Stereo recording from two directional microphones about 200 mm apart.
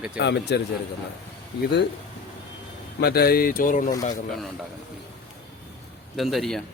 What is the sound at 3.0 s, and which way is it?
Speech, 50° left (ahead or behind).